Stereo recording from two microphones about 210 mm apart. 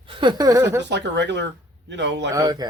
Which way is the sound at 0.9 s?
55° right (ahead or behind).